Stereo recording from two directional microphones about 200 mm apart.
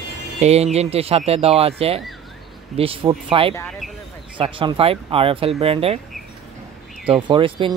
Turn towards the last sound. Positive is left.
turn(degrees=-25)  # may be behind; listen again after turning